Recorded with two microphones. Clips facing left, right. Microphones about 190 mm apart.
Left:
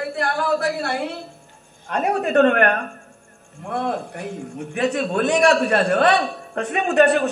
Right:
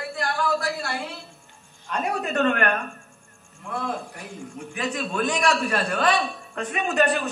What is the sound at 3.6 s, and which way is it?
A man's voice, 60° left (ahead or behind).